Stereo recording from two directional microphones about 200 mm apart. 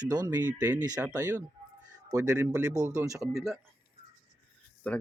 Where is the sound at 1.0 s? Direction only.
10° right (ahead or behind).